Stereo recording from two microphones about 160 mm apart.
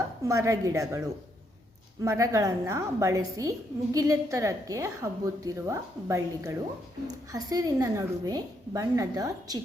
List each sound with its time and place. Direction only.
0.3 s a woman's voice: 20° right (ahead or behind)